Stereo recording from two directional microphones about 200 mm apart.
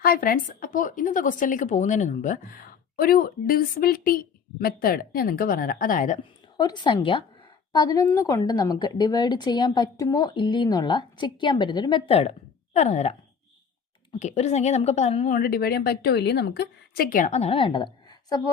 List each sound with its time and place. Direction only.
0.0 s speech: 45° left (ahead or behind)
6.6 s a woman's voice: 20° left (ahead or behind)